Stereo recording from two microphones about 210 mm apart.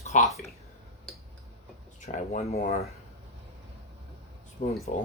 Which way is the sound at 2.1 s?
30° left (ahead or behind).